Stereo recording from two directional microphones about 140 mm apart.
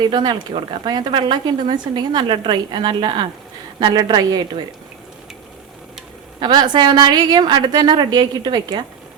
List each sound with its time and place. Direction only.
0.0 s speech: 30° right (ahead or behind)
6.4 s speech: 35° right (ahead or behind)